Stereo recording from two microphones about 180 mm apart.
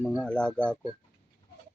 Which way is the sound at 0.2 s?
5° left (ahead or behind).